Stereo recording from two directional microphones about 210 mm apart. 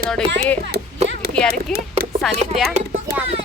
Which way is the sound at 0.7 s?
50° right (ahead or behind).